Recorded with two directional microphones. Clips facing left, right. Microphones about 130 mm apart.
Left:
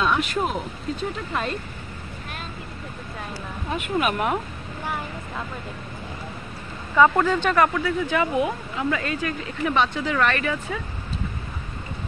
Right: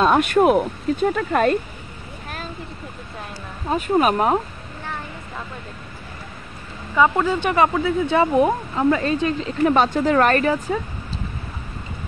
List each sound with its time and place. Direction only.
0.0 s speech: 50° right (ahead or behind)
3.6 s speech: 35° right (ahead or behind)
7.0 s speech: 10° right (ahead or behind); by 10.8 s 35° right (ahead or behind)